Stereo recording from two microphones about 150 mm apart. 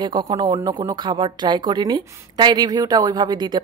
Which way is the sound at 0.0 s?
30° right (ahead or behind).